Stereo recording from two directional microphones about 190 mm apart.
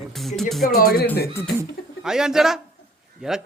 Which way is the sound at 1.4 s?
10° left (ahead or behind).